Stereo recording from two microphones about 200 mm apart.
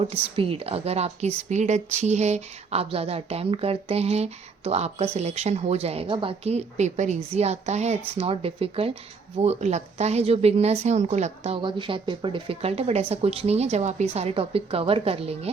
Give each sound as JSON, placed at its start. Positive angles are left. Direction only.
{"t": 0.0, "sound": "a woman's voice", "side_deg": -30}